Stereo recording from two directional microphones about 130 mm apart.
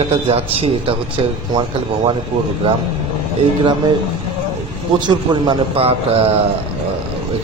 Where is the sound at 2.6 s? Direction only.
45° right (ahead or behind).